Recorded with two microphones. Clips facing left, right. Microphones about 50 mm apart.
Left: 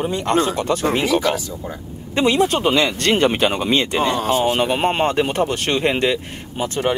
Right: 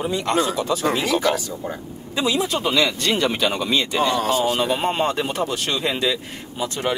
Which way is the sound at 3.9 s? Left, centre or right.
Left.